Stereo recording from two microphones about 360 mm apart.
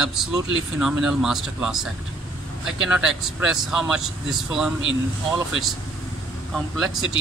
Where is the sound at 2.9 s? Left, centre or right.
Centre.